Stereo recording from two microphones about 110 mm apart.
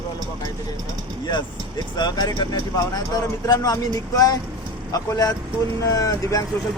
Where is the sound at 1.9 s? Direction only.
40° left (ahead or behind).